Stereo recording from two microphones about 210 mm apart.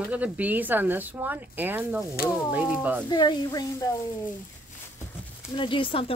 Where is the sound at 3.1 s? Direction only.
20° left (ahead or behind).